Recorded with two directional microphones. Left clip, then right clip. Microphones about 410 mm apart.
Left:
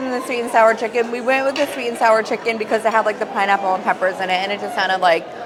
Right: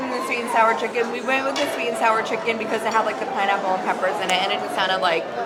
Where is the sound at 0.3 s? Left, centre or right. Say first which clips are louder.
Left 5 dB; left.